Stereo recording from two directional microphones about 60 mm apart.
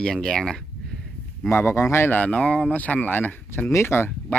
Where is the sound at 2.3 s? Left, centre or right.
Centre.